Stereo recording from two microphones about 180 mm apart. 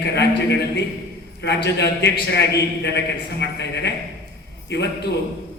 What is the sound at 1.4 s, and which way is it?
A man's voice, 70° left (ahead or behind).